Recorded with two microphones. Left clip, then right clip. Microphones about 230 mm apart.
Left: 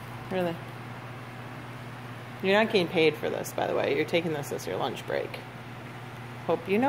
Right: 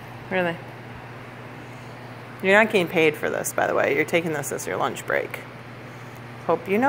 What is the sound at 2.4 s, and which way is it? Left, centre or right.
Speech, centre.